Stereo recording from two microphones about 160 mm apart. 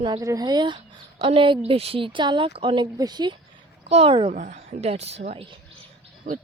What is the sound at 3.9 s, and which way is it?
Speech, 35° right (ahead or behind).